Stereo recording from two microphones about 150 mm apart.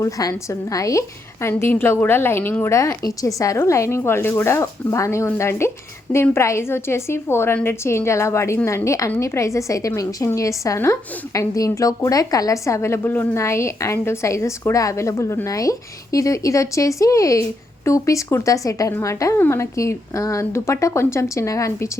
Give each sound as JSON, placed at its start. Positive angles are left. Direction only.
{"t": 0.0, "sound": "a woman's voice", "side_deg": 20}